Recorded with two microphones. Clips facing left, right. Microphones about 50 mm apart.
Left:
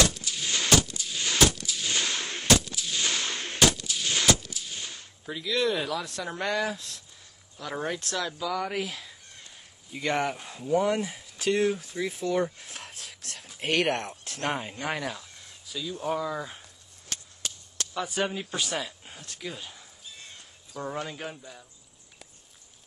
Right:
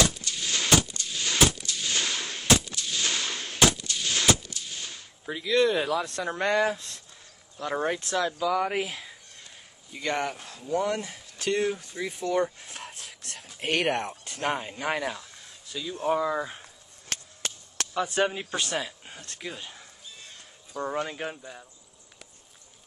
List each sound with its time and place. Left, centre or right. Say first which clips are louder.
0.0 s coin: even; centre
2.4 s gunshot: even; centre
5.2 s a man's voice: right 4 dB; centre
6.5 s speech: right 4 dB; centre
9.9 s speech: left 1 dB; centre
17.1 s a sound: right 3 dB; right
17.9 s a man's voice: right 3 dB; centre